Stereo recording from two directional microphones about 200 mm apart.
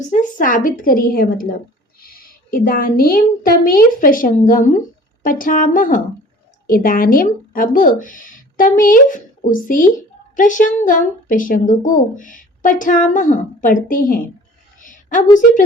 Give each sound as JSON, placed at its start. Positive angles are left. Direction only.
{"t": 0.0, "sound": "a woman's voice", "side_deg": 40}